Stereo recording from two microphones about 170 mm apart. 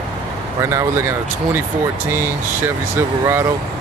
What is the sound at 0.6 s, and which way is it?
Speech, 20° right (ahead or behind).